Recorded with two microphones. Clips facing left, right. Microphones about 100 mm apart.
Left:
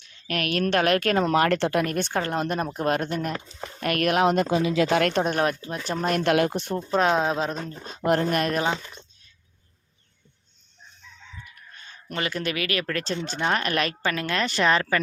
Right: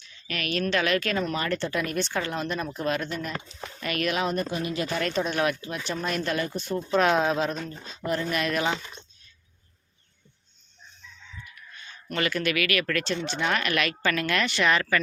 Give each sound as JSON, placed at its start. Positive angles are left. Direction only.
{"t": 0.0, "sound": "a woman's voice", "side_deg": 55}
{"t": 1.2, "sound": "speech", "side_deg": 70}
{"t": 5.3, "sound": "speech", "side_deg": 40}
{"t": 6.2, "sound": "speech", "side_deg": 80}
{"t": 6.7, "sound": "speech", "side_deg": 25}
{"t": 7.9, "sound": "speech", "side_deg": 60}
{"t": 12.1, "sound": "speech", "side_deg": 25}
{"t": 14.0, "sound": "speech", "side_deg": 25}